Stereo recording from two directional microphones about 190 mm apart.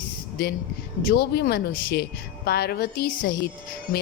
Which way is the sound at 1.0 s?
55° left (ahead or behind).